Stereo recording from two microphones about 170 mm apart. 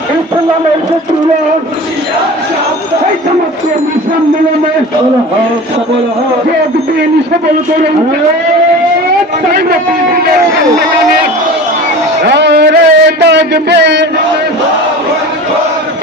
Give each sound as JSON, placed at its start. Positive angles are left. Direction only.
{"t": 9.5, "sound": "a man's voice", "side_deg": -65}
{"t": 12.2, "sound": "a man's voice", "side_deg": -90}